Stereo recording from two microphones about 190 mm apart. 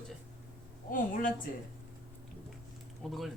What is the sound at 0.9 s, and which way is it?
Speech, 45° left (ahead or behind).